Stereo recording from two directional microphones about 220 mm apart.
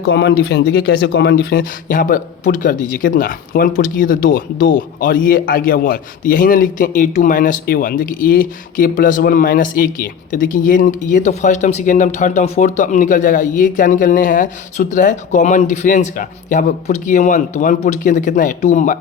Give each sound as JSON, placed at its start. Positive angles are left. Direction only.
{"t": 0.0, "sound": "speech", "side_deg": 50}